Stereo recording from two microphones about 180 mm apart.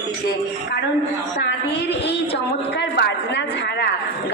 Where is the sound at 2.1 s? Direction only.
70° left (ahead or behind).